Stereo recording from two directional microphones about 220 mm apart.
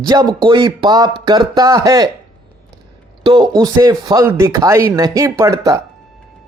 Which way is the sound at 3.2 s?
20° right (ahead or behind).